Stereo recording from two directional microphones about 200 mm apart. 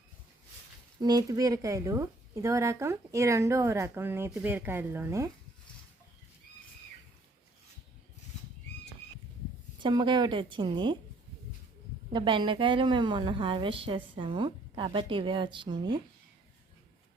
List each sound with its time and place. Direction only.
0.9 s a woman's voice: 20° right (ahead or behind)
9.8 s a woman's voice: 20° right (ahead or behind)
12.1 s a woman's voice: 25° right (ahead or behind)